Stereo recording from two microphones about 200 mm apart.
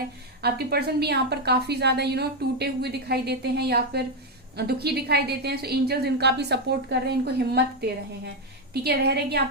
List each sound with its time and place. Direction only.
0.4 s a woman's voice: 50° right (ahead or behind)